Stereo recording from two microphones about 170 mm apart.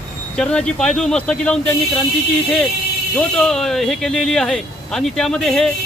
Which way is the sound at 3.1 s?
5° left (ahead or behind).